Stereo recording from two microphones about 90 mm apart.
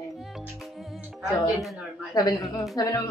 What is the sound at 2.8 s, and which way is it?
Speech, 35° left (ahead or behind).